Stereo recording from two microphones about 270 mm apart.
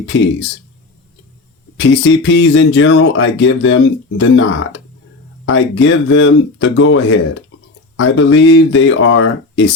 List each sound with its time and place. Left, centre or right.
0.0 s speech: left
1.7 s speech: left